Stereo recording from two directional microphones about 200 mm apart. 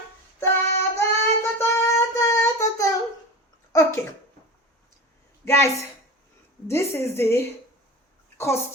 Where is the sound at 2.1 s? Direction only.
15° left (ahead or behind).